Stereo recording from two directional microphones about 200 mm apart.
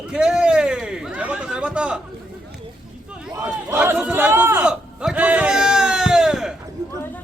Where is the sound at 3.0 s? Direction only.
5° right (ahead or behind).